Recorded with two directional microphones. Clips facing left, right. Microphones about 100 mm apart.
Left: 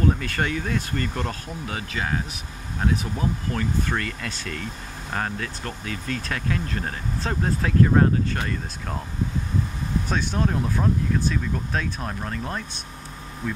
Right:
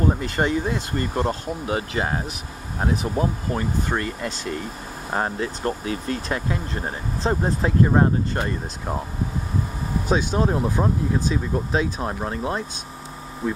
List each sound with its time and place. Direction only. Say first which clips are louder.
0.0 s speech: right 2 dB; 20° right (ahead or behind)
10.0 s speech: right 8 dB; 10° right (ahead or behind)
10.4 s speech: right 3 dB; 25° right (ahead or behind)